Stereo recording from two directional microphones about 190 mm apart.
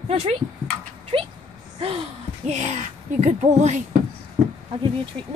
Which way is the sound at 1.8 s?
30° right (ahead or behind).